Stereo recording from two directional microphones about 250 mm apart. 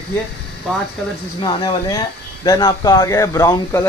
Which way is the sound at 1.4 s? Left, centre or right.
Centre.